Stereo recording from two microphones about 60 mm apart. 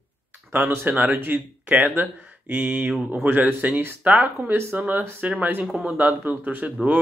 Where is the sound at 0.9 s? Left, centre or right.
Right.